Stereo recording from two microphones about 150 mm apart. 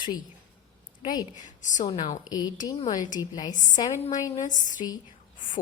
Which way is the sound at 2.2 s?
25° left (ahead or behind).